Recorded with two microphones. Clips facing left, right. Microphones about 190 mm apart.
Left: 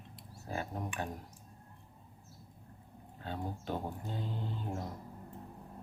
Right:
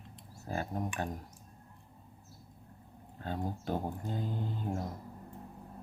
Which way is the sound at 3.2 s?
40° right (ahead or behind).